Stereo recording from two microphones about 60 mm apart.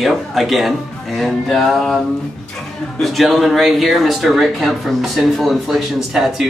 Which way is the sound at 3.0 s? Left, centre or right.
Centre.